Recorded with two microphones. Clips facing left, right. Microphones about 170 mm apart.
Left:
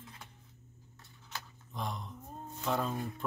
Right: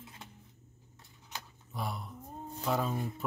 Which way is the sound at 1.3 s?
15° right (ahead or behind).